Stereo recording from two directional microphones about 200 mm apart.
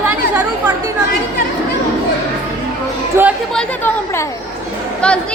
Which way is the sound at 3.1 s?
15° right (ahead or behind).